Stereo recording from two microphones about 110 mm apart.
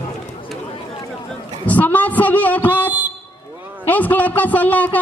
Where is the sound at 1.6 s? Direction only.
15° left (ahead or behind).